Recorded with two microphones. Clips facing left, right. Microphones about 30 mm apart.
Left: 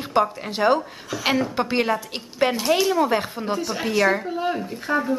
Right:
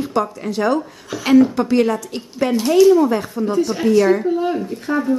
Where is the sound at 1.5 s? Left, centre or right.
Left.